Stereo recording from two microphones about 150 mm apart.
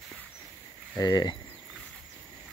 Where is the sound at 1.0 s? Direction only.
25° left (ahead or behind).